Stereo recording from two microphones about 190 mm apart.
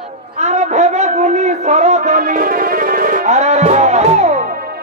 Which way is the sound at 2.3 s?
50° right (ahead or behind).